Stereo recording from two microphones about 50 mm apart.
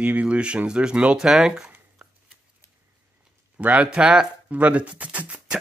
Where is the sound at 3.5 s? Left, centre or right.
Right.